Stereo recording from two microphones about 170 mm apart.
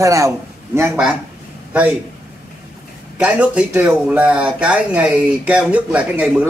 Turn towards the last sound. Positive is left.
turn(degrees=-5)  # may be behind; listen again after turning